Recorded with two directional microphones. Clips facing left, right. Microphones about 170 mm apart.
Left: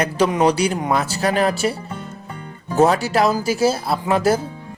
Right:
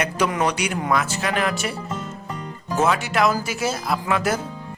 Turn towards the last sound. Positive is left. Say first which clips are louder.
# left 5 dB
turn(degrees=30)  # may be behind; listen again after turning